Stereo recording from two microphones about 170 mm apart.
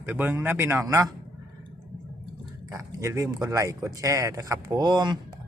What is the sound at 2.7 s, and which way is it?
Speech, 20° right (ahead or behind).